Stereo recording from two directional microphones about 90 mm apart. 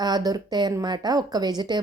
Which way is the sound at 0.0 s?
50° right (ahead or behind).